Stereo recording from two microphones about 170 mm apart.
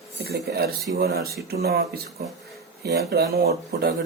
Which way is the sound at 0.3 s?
70° right (ahead or behind).